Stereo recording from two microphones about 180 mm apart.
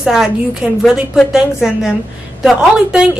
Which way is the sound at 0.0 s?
5° right (ahead or behind).